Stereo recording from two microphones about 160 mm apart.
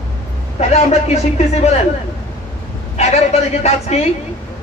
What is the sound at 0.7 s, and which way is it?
A man's voice, 45° left (ahead or behind).